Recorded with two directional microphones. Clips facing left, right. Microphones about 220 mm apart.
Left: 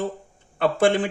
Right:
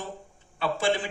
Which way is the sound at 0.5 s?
55° left (ahead or behind).